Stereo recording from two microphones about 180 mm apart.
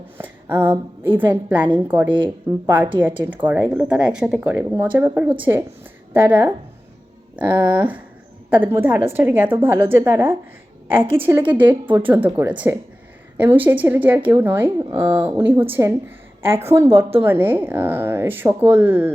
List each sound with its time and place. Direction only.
0.2 s a sound: 10° right (ahead or behind)
1.0 s speech: 10° right (ahead or behind)
2.0 s speech: 25° right (ahead or behind)
3.0 s a woman's voice: 10° right (ahead or behind)